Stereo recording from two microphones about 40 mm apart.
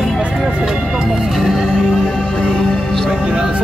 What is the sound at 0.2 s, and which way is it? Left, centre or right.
Music, right.